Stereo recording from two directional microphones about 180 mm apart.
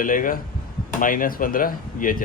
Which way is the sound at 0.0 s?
50° left (ahead or behind).